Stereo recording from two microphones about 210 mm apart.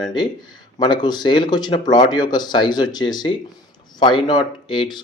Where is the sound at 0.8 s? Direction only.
20° left (ahead or behind).